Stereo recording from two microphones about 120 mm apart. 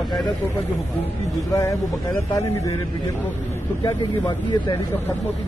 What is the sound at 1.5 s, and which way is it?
Speech, 25° left (ahead or behind).